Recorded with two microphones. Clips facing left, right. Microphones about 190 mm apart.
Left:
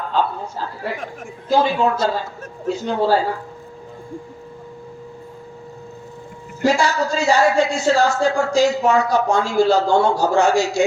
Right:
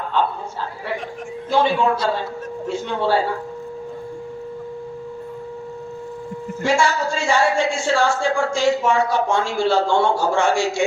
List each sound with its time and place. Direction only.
0.1 s a sound: 40° left (ahead or behind)
1.5 s speech: 40° left (ahead or behind)
6.6 s speech: 40° left (ahead or behind)